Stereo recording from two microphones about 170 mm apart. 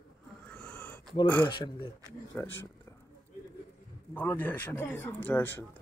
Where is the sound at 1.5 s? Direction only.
25° left (ahead or behind).